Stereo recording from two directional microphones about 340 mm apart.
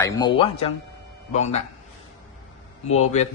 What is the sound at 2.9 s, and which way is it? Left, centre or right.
Speech, centre.